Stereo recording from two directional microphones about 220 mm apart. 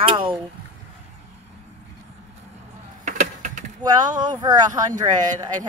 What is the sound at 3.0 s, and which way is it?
Typing, 35° right (ahead or behind).